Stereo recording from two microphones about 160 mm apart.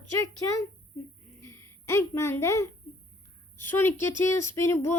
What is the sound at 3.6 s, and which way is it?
Speech, 15° left (ahead or behind).